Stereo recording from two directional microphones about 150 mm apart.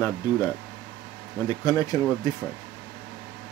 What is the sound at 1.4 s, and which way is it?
Speech, 25° left (ahead or behind).